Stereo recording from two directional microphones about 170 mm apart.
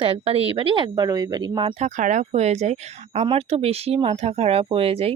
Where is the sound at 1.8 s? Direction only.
45° right (ahead or behind).